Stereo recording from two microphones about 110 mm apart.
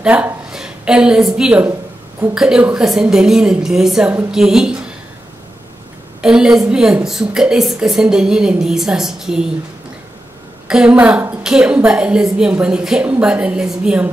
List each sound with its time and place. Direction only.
0.0 s a woman's voice: 10° right (ahead or behind)
6.2 s a woman's voice: 5° right (ahead or behind)
10.7 s a woman's voice: 10° right (ahead or behind)